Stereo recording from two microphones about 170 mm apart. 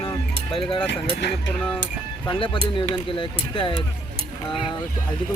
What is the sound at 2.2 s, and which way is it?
Speech, 30° left (ahead or behind).